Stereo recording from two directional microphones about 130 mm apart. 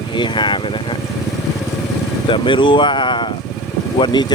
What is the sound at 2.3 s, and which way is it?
Speech, 40° left (ahead or behind).